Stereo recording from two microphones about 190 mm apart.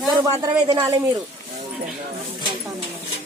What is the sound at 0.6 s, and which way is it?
Speech, 25° right (ahead or behind).